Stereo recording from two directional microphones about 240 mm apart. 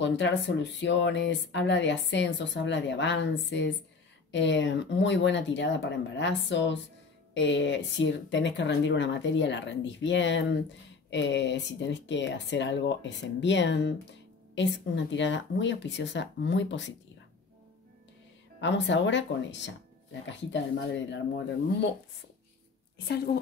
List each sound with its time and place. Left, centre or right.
0.0 s speech: left
18.6 s speech: left
23.0 s a woman's voice: left